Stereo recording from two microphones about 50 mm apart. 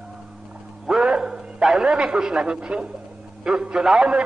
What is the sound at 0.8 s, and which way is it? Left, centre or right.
A man's voice, centre.